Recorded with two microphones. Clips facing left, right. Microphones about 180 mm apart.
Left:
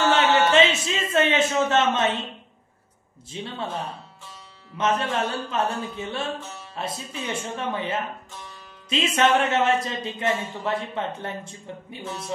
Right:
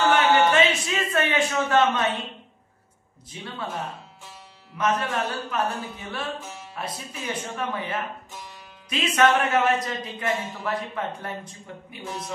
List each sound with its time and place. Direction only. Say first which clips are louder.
0.5 s speech: left 2 dB; 25° left (ahead or behind)
3.3 s a man's voice: left 2 dB; 25° left (ahead or behind)